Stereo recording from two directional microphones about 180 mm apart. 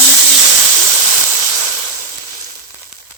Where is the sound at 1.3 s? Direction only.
15° right (ahead or behind).